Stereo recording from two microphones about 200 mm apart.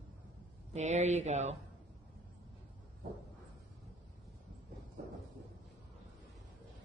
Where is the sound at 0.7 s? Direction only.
35° right (ahead or behind).